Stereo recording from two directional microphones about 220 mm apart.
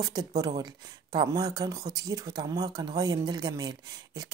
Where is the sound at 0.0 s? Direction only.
15° right (ahead or behind).